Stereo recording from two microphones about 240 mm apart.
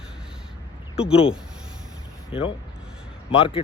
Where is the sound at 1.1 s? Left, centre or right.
Left.